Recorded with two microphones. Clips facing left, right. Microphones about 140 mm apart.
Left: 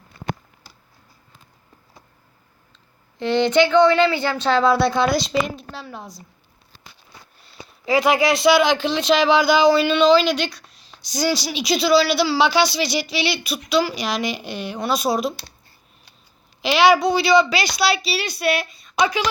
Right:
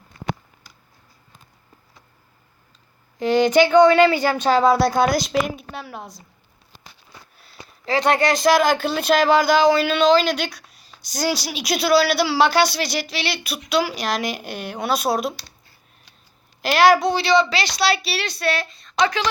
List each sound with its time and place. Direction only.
3.2 s speech: 40° right (ahead or behind)
5.7 s speech: 5° right (ahead or behind)
7.3 s a sound: centre (ahead or behind)
7.9 s speech: 5° left (ahead or behind)
16.6 s a woman's voice: centre (ahead or behind)